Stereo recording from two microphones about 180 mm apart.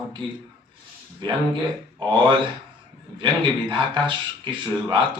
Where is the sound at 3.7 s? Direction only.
25° right (ahead or behind).